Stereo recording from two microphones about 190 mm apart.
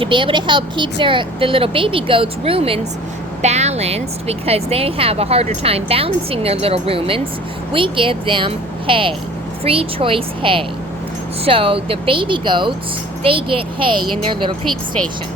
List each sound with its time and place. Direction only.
0.0 s speech: 25° right (ahead or behind)